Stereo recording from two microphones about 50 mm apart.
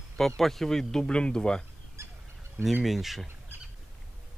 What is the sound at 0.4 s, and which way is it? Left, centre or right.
Speech, centre.